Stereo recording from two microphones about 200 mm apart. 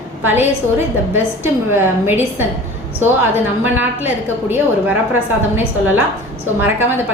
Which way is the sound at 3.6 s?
10° right (ahead or behind).